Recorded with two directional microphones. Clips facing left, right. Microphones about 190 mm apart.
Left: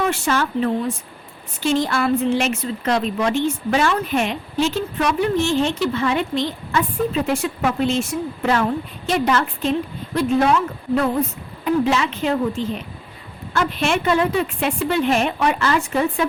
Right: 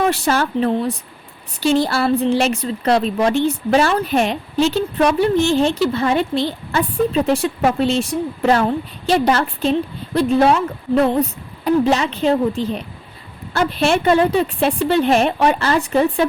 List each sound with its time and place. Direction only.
0.1 s a woman's voice: 35° right (ahead or behind)
11.6 s a woman's voice: 35° right (ahead or behind)